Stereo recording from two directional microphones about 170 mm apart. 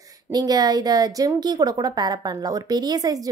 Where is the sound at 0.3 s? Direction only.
25° right (ahead or behind).